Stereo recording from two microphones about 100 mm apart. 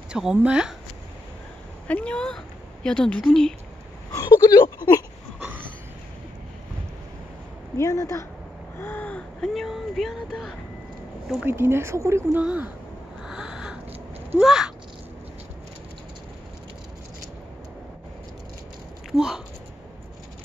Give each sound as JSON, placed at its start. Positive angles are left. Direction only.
{"t": 0.1, "sound": "speech", "side_deg": -10}
{"t": 1.9, "sound": "speech", "side_deg": 15}
{"t": 4.1, "sound": "speech", "side_deg": 35}
{"t": 7.7, "sound": "speech", "side_deg": 30}
{"t": 8.7, "sound": "gasp", "side_deg": 20}
{"t": 9.5, "sound": "speech", "side_deg": 0}
{"t": 11.4, "sound": "speech", "side_deg": -25}
{"t": 12.4, "sound": "speech", "side_deg": -15}
{"t": 13.2, "sound": "a sound", "side_deg": -5}
{"t": 14.4, "sound": "speech", "side_deg": -5}
{"t": 19.1, "sound": "speech", "side_deg": -5}